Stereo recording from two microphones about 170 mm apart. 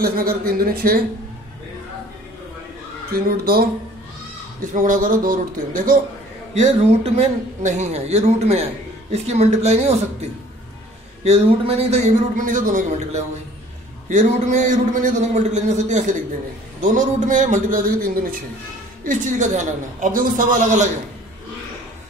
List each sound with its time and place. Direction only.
0.0 s speech: 60° right (ahead or behind)
3.2 s speech: 60° right (ahead or behind)
4.6 s a man's voice: 50° right (ahead or behind)
6.5 s a man's voice: 40° right (ahead or behind); by 18.4 s 55° right (ahead or behind)
19.0 s a man's voice: 45° right (ahead or behind)